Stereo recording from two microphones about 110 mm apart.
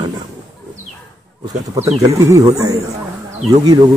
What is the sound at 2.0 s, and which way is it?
Speech, 30° right (ahead or behind).